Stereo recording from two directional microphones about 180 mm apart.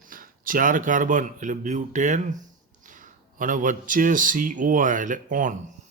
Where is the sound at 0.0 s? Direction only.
50° right (ahead or behind).